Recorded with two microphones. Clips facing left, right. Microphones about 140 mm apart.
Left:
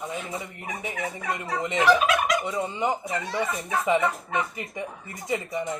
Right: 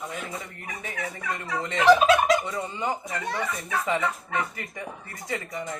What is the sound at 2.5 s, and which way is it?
Speech, 20° left (ahead or behind).